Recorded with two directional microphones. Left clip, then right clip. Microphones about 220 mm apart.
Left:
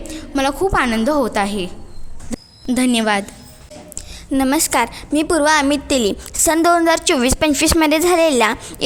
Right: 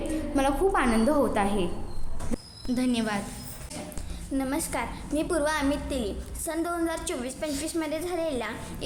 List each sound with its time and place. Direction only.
0.1 s a woman's voice: 45° left (ahead or behind)
2.6 s a woman's voice: 40° left (ahead or behind)
4.3 s a woman's voice: 50° left (ahead or behind)